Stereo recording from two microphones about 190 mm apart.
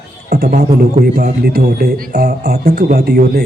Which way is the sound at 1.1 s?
55° right (ahead or behind).